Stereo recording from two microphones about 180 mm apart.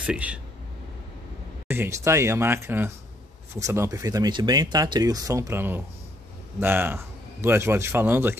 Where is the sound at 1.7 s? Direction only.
15° right (ahead or behind).